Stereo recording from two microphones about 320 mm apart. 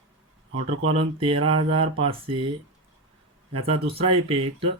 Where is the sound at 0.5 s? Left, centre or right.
Right.